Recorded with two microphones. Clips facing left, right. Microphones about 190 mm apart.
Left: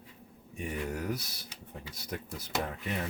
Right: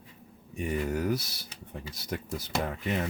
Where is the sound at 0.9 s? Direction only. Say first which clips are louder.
Right 6 dB; 90° right.